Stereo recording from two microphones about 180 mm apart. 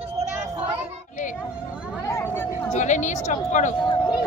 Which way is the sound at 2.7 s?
40° left (ahead or behind).